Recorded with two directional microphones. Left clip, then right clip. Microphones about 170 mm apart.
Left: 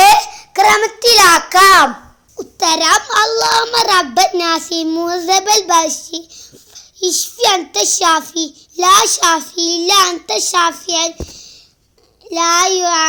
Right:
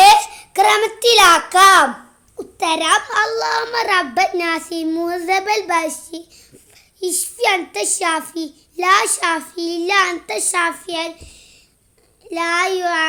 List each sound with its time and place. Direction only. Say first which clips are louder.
0.0 s a sound: left 1 dB; centre (ahead or behind)
2.4 s a child's voice: left 4 dB; 30° left (ahead or behind)
5.8 s a child's voice: left 5 dB; 5° left (ahead or behind)
7.4 s a child's voice: left 4 dB; 30° left (ahead or behind)